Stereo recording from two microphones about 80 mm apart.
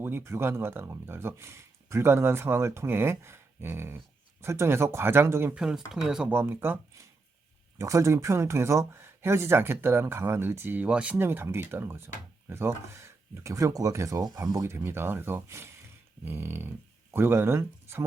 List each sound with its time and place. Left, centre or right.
0.0 s speech: right
5.5 s speech: centre
6.3 s speech: right
7.8 s speech: right; by 11.2 s centre
11.2 s speech: right
14.7 s speech: right